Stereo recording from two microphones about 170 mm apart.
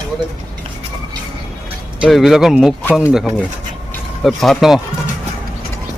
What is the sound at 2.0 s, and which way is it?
Speech, centre (ahead or behind).